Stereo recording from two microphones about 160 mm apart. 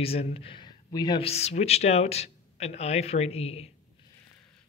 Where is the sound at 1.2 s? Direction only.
40° left (ahead or behind).